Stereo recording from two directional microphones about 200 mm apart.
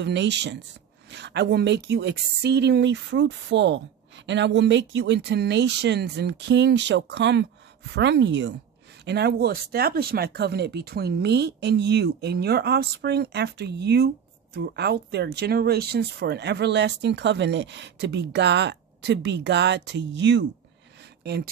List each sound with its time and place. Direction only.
0.0 s speech: 60° right (ahead or behind)